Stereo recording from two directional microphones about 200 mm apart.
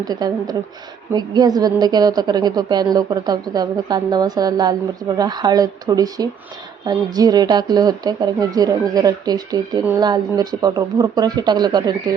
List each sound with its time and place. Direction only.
0.0 s a woman's voice: 20° right (ahead or behind)